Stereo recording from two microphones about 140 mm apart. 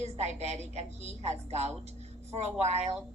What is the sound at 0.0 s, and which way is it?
Speech, 50° right (ahead or behind).